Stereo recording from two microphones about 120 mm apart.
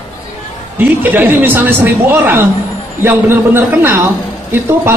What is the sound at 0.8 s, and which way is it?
A man's voice, 15° right (ahead or behind).